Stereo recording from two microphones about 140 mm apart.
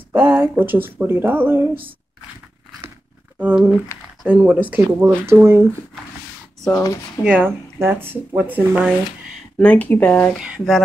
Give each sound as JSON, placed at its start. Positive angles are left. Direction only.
{"t": 0.1, "sound": "speech", "side_deg": -15}
{"t": 3.3, "sound": "speech", "side_deg": -10}
{"t": 7.2, "sound": "speech", "side_deg": -10}
{"t": 9.6, "sound": "speech", "side_deg": 10}
{"t": 10.3, "sound": "speech", "side_deg": 0}